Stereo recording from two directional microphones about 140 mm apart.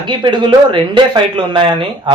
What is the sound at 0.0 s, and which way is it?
Speech, 35° right (ahead or behind).